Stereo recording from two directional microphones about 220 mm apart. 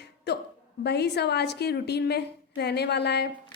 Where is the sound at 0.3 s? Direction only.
50° left (ahead or behind).